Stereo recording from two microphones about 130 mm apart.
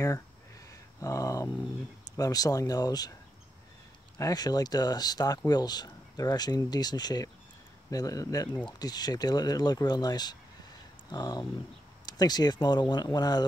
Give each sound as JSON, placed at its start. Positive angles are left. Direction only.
{"t": 0.7, "sound": "a sound", "side_deg": 25}
{"t": 2.1, "sound": "speech", "side_deg": 25}
{"t": 4.2, "sound": "speech", "side_deg": 30}